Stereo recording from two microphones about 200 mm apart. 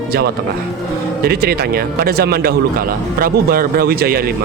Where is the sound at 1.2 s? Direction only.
50° right (ahead or behind).